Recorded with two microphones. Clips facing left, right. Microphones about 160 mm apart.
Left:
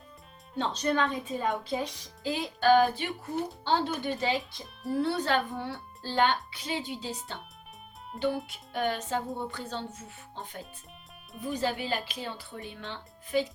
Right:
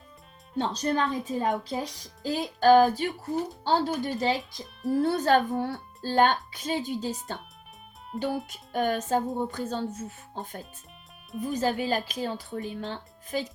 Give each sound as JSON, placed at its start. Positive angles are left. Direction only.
{"t": 0.6, "sound": "speech", "side_deg": -40}
{"t": 8.1, "sound": "speech", "side_deg": 0}
{"t": 8.7, "sound": "speech", "side_deg": -45}